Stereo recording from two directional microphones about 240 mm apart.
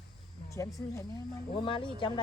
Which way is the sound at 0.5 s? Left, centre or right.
Centre.